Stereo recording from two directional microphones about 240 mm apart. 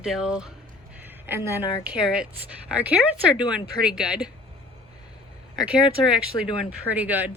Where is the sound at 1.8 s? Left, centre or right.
Centre.